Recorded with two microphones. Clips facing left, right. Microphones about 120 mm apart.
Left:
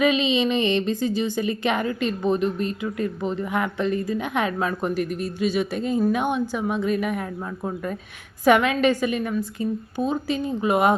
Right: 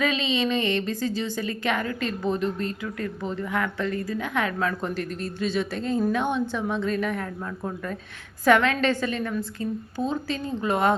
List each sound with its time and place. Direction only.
0.0 s a woman's voice: 15° left (ahead or behind)